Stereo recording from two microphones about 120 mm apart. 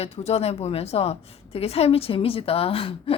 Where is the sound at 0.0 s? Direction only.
55° left (ahead or behind).